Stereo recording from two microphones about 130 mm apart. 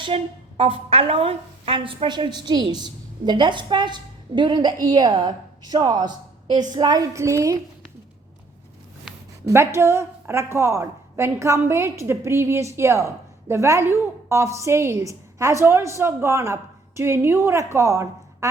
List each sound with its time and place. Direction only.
0.0 s a woman's voice: 45° right (ahead or behind); by 7.6 s 25° right (ahead or behind)
9.5 s a woman's voice: 20° right (ahead or behind)